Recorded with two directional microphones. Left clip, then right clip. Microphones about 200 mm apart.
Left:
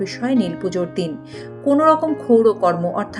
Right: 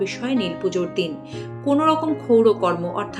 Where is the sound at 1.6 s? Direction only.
50° left (ahead or behind).